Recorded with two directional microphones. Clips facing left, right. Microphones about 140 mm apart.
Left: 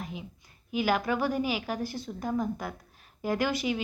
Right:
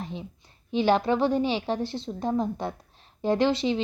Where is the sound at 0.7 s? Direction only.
25° right (ahead or behind).